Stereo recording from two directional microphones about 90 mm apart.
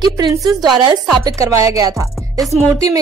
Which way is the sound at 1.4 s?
35° right (ahead or behind).